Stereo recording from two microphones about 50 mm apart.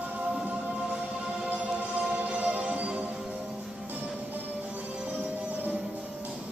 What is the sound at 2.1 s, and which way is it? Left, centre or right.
Music, right.